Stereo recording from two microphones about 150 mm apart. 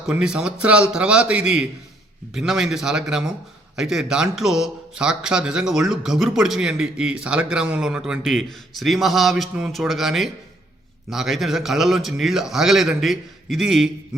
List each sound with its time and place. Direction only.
0.1 s a man's voice: 5° right (ahead or behind)